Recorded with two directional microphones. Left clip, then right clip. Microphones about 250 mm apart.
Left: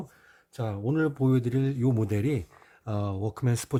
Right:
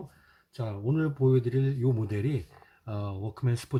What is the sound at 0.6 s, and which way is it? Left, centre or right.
Speech, left.